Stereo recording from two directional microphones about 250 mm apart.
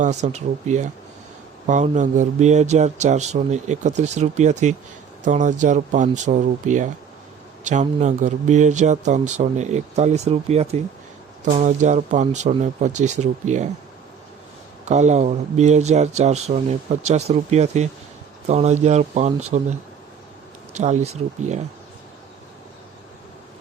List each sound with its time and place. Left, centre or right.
0.0 s speech: right
14.8 s speech: right
20.7 s speech: right